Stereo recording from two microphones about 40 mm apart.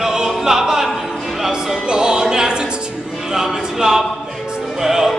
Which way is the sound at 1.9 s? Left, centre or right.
Right.